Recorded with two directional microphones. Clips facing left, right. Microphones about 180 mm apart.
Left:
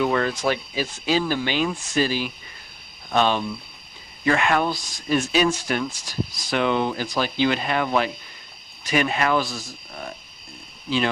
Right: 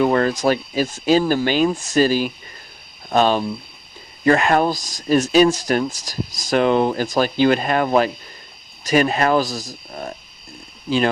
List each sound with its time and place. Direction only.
0.0 s speech: 40° right (ahead or behind)